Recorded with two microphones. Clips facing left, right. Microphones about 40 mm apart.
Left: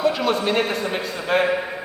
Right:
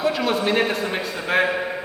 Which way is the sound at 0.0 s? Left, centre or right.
Centre.